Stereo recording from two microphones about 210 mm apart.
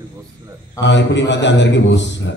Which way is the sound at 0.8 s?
55° left (ahead or behind).